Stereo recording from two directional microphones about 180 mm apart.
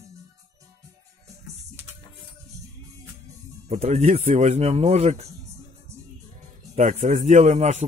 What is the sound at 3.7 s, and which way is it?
Speech, 40° right (ahead or behind).